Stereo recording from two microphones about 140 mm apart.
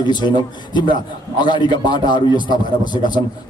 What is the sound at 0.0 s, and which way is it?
Speech, 30° left (ahead or behind).